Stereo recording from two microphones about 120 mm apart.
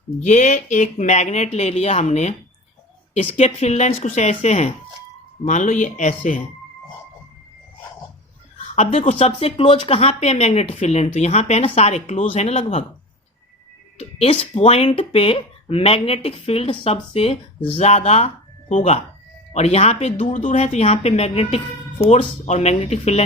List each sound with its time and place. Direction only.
0.2 s speech: 75° left (ahead or behind)
3.3 s speech: 65° left (ahead or behind); by 6.4 s 90° left
8.7 s speech: 70° left (ahead or behind)
14.0 s speech: 60° left (ahead or behind)
17.7 s speech: 65° left (ahead or behind)
19.5 s speech: 60° left (ahead or behind)
20.3 s speech: 80° left; by 23.2 s 65° left (ahead or behind)